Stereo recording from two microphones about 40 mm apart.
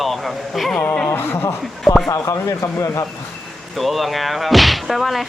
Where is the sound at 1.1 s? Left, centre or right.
Left.